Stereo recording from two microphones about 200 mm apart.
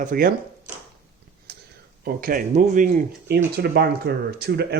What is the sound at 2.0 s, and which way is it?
Speech, 45° right (ahead or behind).